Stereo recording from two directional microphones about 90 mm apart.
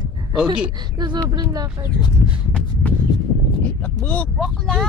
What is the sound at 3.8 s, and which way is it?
Speech, 15° left (ahead or behind).